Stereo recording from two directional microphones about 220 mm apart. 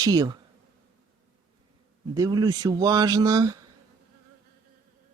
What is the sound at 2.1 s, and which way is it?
Speech, 15° right (ahead or behind).